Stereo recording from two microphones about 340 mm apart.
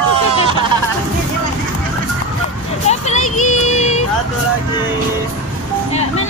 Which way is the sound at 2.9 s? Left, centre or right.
Centre.